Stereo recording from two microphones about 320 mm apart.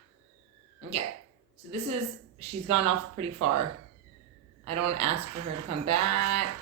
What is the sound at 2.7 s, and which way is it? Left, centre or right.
Speech, right.